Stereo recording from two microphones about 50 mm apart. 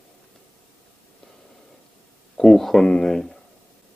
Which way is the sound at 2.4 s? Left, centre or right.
Centre.